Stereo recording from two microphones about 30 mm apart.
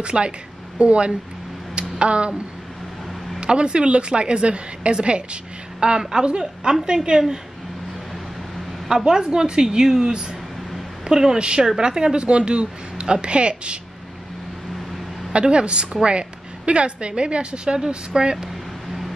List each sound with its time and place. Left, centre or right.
0.0 s a woman's voice: right
8.8 s a woman's voice: right
11.3 s a woman's voice: right
11.6 s a woman's voice: right
15.3 s a woman's voice: right